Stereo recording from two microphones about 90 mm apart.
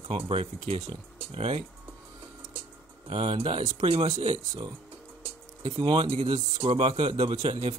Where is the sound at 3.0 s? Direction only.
90° right.